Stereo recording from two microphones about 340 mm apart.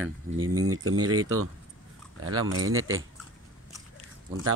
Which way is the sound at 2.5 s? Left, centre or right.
Right.